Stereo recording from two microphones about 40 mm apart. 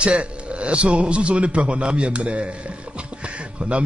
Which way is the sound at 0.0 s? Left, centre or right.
Right.